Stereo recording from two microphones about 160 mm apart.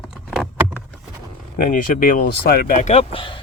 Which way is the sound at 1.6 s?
60° left (ahead or behind).